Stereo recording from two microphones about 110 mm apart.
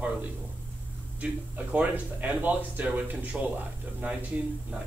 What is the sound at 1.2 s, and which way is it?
Speech, 15° right (ahead or behind).